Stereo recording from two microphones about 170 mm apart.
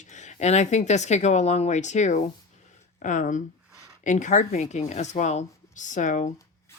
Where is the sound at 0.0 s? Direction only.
45° left (ahead or behind).